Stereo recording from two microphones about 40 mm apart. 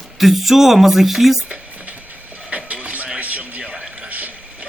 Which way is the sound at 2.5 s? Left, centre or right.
Right.